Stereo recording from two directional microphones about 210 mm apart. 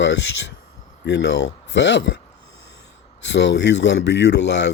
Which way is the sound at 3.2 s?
55° left (ahead or behind).